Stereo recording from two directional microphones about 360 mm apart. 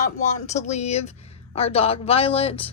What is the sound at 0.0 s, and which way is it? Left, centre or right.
Speech, centre.